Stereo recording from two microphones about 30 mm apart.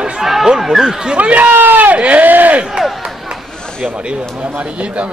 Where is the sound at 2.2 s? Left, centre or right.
Right.